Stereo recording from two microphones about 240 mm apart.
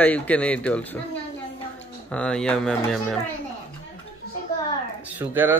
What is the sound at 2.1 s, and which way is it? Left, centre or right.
Speech, centre.